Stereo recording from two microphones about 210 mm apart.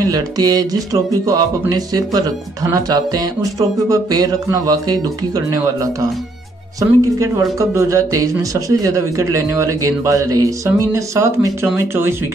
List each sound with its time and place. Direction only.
0.0 s speech: 20° right (ahead or behind)